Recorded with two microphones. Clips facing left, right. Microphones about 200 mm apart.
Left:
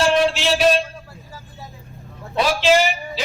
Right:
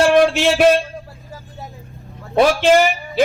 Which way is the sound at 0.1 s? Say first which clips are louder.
Right 5 dB; 50° right (ahead or behind).